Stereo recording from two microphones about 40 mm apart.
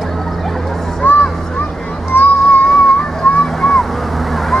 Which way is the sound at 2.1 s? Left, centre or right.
Left.